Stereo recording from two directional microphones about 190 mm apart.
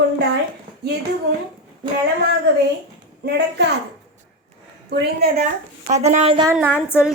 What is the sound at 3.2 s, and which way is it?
Speech, 60° right (ahead or behind).